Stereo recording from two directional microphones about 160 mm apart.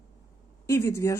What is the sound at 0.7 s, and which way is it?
Speech, 15° left (ahead or behind).